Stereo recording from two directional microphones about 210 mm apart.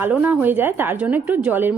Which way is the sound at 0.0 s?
10° right (ahead or behind).